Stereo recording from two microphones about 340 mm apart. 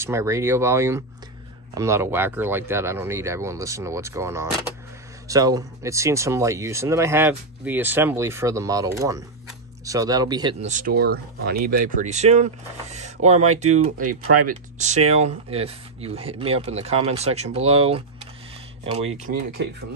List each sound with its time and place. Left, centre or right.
0.0 s speech: centre; by 19.7 s right